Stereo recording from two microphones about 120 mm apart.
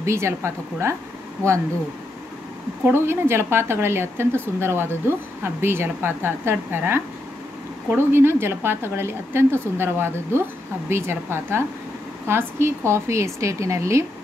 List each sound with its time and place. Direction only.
0.0 s a woman's voice: 25° right (ahead or behind)
2.8 s a woman's voice: 20° right (ahead or behind)